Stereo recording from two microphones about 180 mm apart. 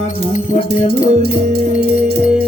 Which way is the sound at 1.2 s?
60° right (ahead or behind).